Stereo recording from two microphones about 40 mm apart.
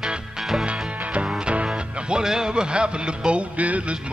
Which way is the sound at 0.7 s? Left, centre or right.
Right.